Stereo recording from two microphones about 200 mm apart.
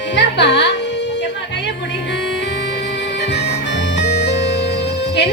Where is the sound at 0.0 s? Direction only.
60° left (ahead or behind).